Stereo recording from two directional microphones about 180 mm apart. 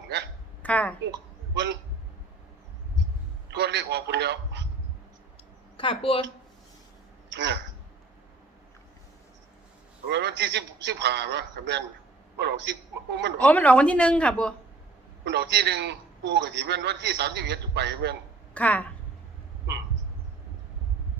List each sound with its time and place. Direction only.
0.6 s a woman's voice: 10° left (ahead or behind)
1.5 s a man's voice: 75° right (ahead or behind)
3.5 s a man's voice: 70° right (ahead or behind)
5.7 s speech: 30° left (ahead or behind)
7.3 s a sound: 75° right (ahead or behind)
10.1 s a man's voice: 70° right (ahead or behind)
13.4 s speech: 10° left (ahead or behind)
15.2 s a man's voice: 70° right (ahead or behind)
18.5 s speech: 10° left (ahead or behind)